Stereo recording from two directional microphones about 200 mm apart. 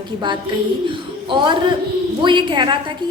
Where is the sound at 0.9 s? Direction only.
25° right (ahead or behind).